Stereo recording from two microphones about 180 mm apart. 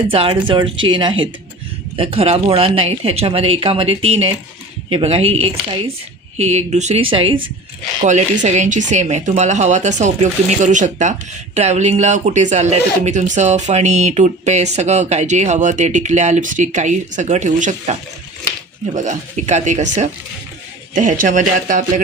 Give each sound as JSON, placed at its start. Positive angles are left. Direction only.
{"t": 0.1, "sound": "speech", "side_deg": -30}
{"t": 8.0, "sound": "speech", "side_deg": -40}
{"t": 18.9, "sound": "speech", "side_deg": -40}
{"t": 20.9, "sound": "speech", "side_deg": -50}